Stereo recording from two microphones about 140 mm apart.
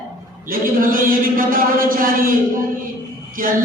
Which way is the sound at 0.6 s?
85° right.